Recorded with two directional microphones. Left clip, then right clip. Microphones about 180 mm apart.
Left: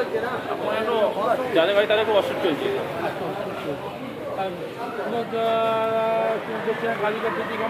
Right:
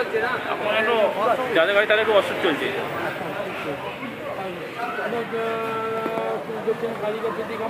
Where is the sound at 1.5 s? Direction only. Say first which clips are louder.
Even; 20° right (ahead or behind).